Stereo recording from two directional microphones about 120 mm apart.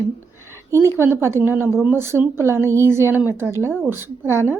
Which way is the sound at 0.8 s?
20° right (ahead or behind).